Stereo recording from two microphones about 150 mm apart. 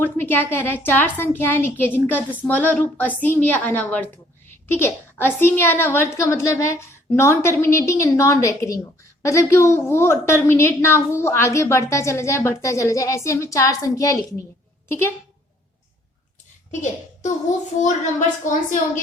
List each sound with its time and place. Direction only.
0.0 s a woman's voice: 15° left (ahead or behind)
17.7 s a woman's voice: 55° left (ahead or behind)